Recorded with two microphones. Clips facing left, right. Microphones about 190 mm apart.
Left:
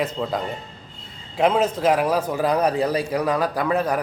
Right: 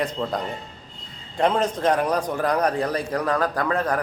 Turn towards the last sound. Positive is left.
turn(degrees=10)  # may be behind; listen again after turning